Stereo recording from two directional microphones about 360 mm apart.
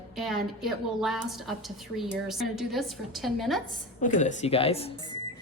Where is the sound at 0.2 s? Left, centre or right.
Centre.